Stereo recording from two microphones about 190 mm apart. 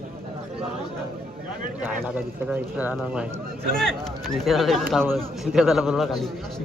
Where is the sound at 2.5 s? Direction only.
10° right (ahead or behind).